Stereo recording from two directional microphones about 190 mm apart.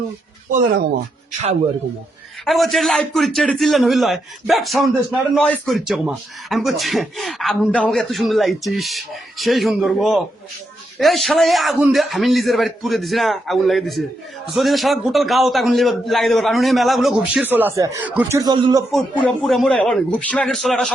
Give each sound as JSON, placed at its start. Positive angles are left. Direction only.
{"t": 2.4, "sound": "a man's voice", "side_deg": 0}
{"t": 18.9, "sound": "a man's voice", "side_deg": 0}